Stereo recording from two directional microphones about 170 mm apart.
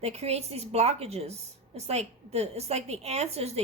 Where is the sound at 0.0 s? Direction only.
40° right (ahead or behind).